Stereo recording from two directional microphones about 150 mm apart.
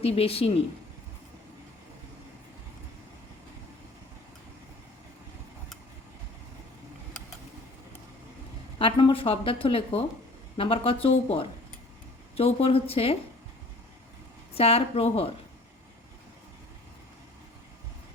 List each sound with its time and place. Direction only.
0.0 s speech: 40° left (ahead or behind)
8.8 s speech: 35° left (ahead or behind)
14.5 s speech: 40° left (ahead or behind)